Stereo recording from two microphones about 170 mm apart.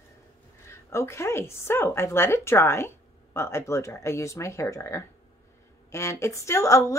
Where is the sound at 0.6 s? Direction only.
15° left (ahead or behind).